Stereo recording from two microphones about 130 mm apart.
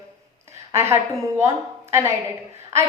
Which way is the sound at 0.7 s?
20° right (ahead or behind).